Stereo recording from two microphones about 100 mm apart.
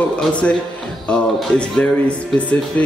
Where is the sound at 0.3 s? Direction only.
10° left (ahead or behind).